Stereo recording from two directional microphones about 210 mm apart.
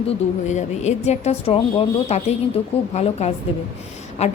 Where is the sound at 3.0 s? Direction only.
30° left (ahead or behind).